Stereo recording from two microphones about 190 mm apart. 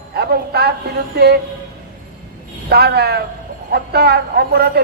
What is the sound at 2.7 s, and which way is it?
A man's voice, 55° right (ahead or behind).